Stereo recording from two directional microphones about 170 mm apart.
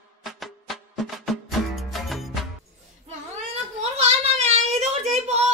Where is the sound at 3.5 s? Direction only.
40° right (ahead or behind).